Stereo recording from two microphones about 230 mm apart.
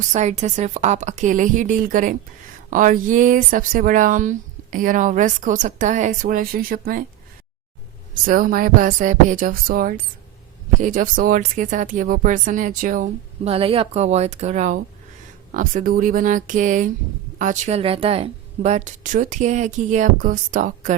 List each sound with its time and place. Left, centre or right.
0.1 s speech: right
8.1 s speech: right